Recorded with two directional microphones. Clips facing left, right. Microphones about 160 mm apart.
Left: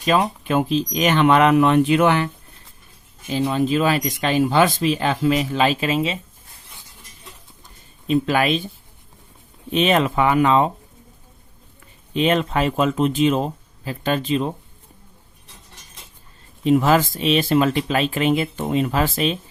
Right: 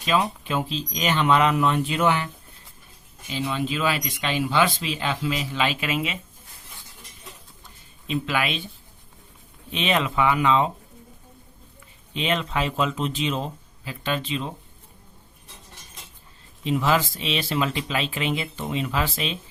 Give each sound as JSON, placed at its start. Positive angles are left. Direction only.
{"t": 0.0, "sound": "speech", "side_deg": 50}
{"t": 3.4, "sound": "speech", "side_deg": 45}
{"t": 8.0, "sound": "speech", "side_deg": 40}
{"t": 9.7, "sound": "speech", "side_deg": 45}
{"t": 12.1, "sound": "speech", "side_deg": 45}
{"t": 16.6, "sound": "speech", "side_deg": 45}